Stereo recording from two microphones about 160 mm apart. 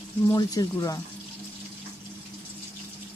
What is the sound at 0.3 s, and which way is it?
Speech, 25° left (ahead or behind).